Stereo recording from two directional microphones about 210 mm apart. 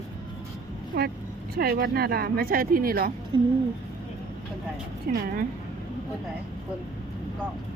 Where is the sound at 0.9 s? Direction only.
50° right (ahead or behind).